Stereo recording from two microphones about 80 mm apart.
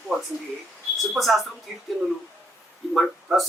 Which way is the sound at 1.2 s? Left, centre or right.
Centre.